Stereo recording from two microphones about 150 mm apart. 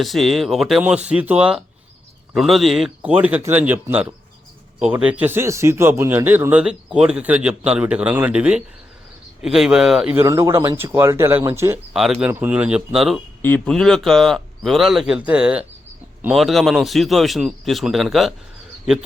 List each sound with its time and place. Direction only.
0.0 s a man's voice: centre (ahead or behind)
10.2 s speech: 20° right (ahead or behind)
11.9 s a man's voice: centre (ahead or behind)